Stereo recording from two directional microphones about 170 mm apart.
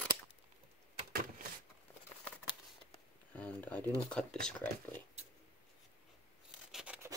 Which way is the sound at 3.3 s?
10° left (ahead or behind).